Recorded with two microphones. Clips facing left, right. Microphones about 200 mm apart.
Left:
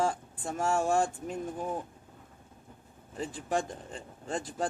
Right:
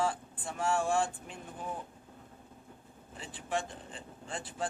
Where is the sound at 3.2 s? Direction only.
40° left (ahead or behind).